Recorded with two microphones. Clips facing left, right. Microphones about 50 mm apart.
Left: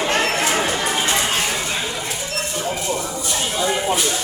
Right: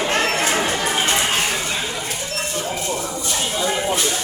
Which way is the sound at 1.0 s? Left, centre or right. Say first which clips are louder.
Right 1 dB; right.